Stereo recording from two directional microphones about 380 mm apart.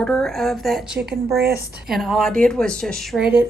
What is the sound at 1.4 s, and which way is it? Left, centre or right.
Speech, right.